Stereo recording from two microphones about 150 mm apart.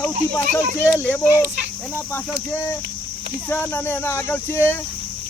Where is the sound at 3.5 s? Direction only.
15° left (ahead or behind).